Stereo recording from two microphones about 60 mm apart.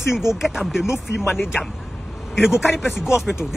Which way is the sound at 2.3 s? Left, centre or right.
Centre.